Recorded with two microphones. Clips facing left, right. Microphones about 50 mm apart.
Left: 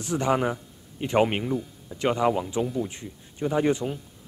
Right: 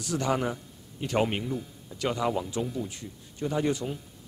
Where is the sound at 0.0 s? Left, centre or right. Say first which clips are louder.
Left 4 dB; left.